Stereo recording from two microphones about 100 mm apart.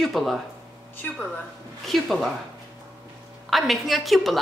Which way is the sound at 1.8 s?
Centre (ahead or behind).